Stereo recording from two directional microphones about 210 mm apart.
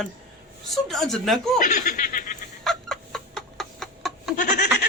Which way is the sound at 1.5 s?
40° left (ahead or behind).